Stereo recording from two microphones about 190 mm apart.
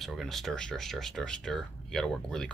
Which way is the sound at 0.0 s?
Centre (ahead or behind).